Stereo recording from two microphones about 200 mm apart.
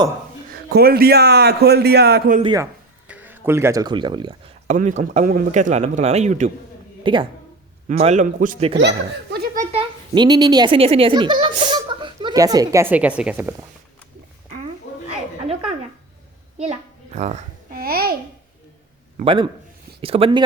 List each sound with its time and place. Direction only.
0.5 s a man's voice: 50° right (ahead or behind)
2.4 s speech: 20° right (ahead or behind)
3.1 s speech: 10° right (ahead or behind)
4.7 s speech: 35° right (ahead or behind)
7.0 s speech: 25° right (ahead or behind)
8.8 s speech: 55° right (ahead or behind)
9.7 s a child's voice: 20° right (ahead or behind)
16.6 s a child's voice: 35° right (ahead or behind); by 18.1 s 50° right (ahead or behind)
19.2 s speech: 25° right (ahead or behind)